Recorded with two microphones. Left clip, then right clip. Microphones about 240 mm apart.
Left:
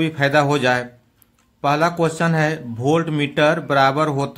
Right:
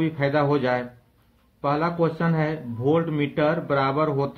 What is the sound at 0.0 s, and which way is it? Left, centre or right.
Speech, left.